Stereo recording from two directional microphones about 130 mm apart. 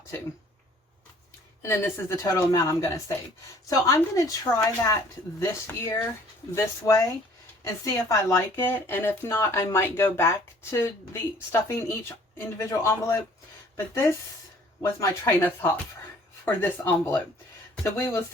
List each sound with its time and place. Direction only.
1.6 s speech: 20° left (ahead or behind)